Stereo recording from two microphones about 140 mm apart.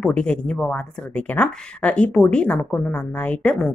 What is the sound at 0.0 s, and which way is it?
Speech, 5° left (ahead or behind).